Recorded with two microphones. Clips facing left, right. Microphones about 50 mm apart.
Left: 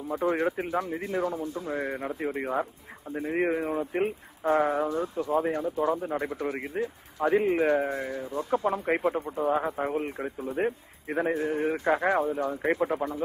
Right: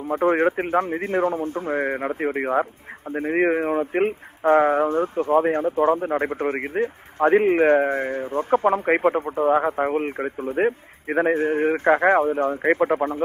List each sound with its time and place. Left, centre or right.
0.1 s speech: right